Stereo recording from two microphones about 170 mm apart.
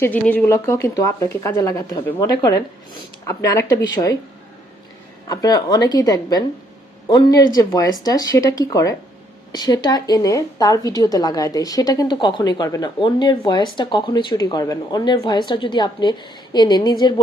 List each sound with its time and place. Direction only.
0.0 s a woman's voice: 10° left (ahead or behind)
5.3 s a woman's voice: 20° left (ahead or behind)